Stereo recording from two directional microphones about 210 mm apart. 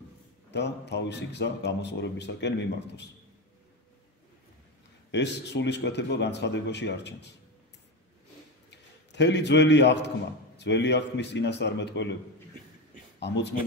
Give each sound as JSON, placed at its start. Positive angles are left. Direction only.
{"t": 0.5, "sound": "a man's voice", "side_deg": 55}
{"t": 5.1, "sound": "a man's voice", "side_deg": 55}
{"t": 8.6, "sound": "a man's voice", "side_deg": 55}
{"t": 13.2, "sound": "a man's voice", "side_deg": 55}